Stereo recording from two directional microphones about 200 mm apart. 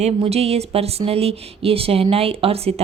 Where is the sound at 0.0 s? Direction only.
30° right (ahead or behind).